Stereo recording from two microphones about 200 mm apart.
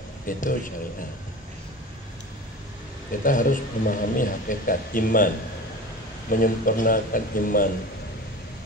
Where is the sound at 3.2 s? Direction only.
40° left (ahead or behind).